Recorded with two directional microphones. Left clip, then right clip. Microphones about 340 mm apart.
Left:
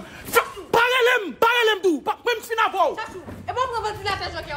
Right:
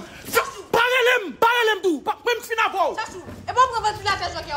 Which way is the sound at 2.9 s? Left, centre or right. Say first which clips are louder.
Right 2 dB; right.